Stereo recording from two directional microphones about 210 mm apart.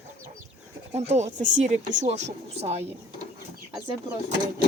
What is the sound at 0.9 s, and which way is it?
Speech, 30° right (ahead or behind).